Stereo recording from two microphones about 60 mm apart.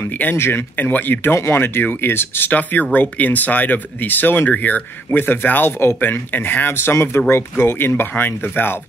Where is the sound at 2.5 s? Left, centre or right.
Left.